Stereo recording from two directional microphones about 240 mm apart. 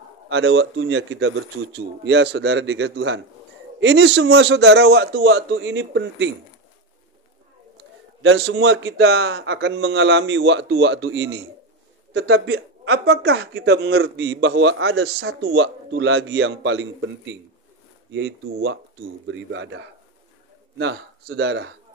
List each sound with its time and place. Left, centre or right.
0.3 s speech: right
8.2 s speech: right
18.1 s speech: right